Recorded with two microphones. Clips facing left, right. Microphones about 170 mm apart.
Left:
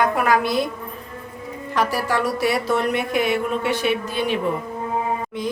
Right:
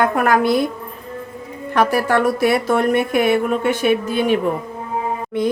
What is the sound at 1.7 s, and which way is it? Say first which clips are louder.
Speech: right 5 dB; 60° right (ahead or behind).